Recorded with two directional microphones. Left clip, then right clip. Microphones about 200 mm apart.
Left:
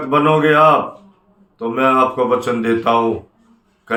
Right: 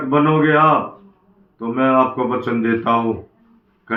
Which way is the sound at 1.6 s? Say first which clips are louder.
Left 2 dB; 30° left (ahead or behind).